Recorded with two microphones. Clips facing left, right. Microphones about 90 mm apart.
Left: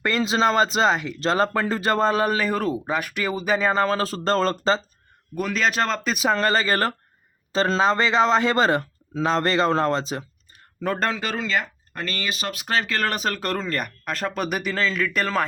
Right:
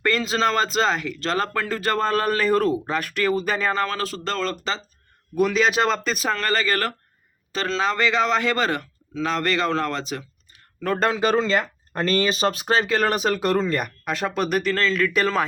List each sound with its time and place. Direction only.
0.0 s a man's voice: 20° left (ahead or behind)
3.8 s speech: 30° left (ahead or behind)
5.3 s a man's voice: centre (ahead or behind)
6.0 s a man's voice: 5° left (ahead or behind)
6.3 s a man's voice: 25° left (ahead or behind)
11.0 s speech: 15° right (ahead or behind)
11.3 s speech: 30° right (ahead or behind); by 15.4 s centre (ahead or behind)